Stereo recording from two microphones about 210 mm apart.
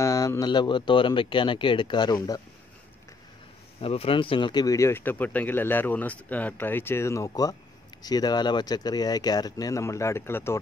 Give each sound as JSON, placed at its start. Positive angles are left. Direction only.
{"t": 0.0, "sound": "speech", "side_deg": 15}
{"t": 3.8, "sound": "speech", "side_deg": 25}